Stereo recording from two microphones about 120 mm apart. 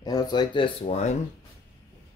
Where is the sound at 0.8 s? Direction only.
70° left (ahead or behind).